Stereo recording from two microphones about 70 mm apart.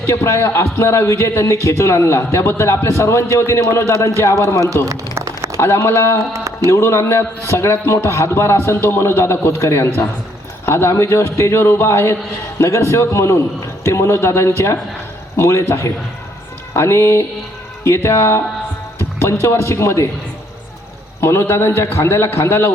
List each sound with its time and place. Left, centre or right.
0.1 s a man's voice: left
5.5 s a man's voice: left
6.3 s a sound: right
6.7 s a man's voice: left
16.7 s a man's voice: left
21.2 s a man's voice: left